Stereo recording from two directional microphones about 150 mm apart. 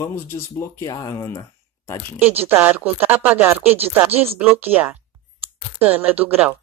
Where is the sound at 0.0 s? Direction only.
15° left (ahead or behind).